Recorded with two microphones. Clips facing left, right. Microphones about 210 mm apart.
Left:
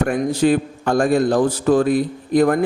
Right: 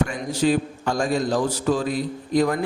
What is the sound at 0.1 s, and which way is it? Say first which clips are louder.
A man's voice: left 5 dB; 55° left (ahead or behind).